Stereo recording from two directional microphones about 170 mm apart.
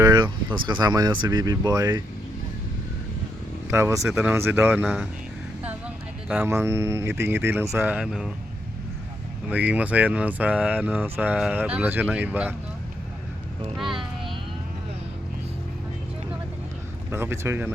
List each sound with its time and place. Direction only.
0.0 s speech: 25° right (ahead or behind)
3.7 s speech: 15° right (ahead or behind)
6.3 s speech: 15° right (ahead or behind)
9.5 s speech: 10° right (ahead or behind)
13.7 s speech: centre (ahead or behind)
17.1 s speech: 15° right (ahead or behind)